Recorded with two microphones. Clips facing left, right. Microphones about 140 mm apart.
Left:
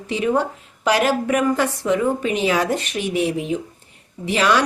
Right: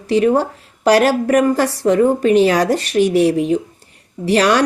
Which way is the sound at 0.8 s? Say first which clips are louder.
Right 6 dB; 40° right (ahead or behind).